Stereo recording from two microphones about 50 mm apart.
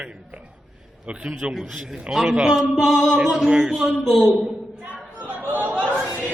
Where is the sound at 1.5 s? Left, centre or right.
Centre.